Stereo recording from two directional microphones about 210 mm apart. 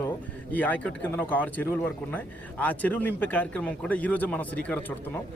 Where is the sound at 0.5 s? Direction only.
5° left (ahead or behind).